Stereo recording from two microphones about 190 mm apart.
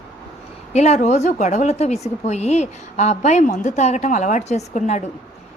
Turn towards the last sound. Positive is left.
turn(degrees=35)  # may be behind; listen again after turning